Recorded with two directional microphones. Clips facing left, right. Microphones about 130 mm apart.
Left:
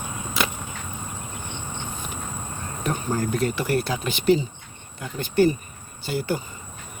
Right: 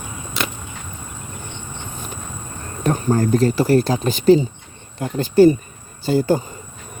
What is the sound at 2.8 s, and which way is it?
Speech, 40° right (ahead or behind).